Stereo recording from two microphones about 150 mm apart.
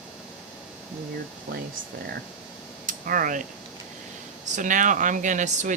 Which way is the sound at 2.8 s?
65° right (ahead or behind).